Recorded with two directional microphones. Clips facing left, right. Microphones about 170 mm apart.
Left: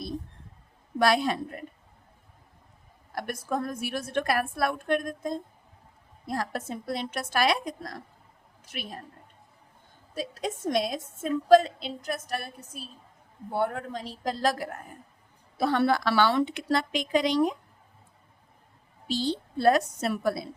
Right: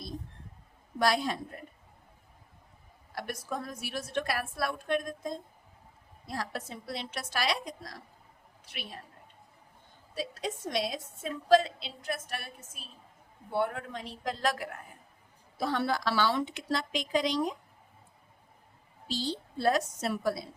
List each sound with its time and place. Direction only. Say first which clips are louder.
0.9 s a woman's voice: left 4 dB; 65° left (ahead or behind)
3.1 s a woman's voice: left 5 dB; 50° left (ahead or behind)
10.2 s a woman's voice: left 3 dB; 50° left (ahead or behind)
15.5 s a woman's voice: left 6 dB; 65° left (ahead or behind)
19.0 s a woman's voice: left 6 dB; 60° left (ahead or behind)